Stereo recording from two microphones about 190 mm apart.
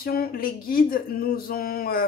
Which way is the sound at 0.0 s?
50° left (ahead or behind).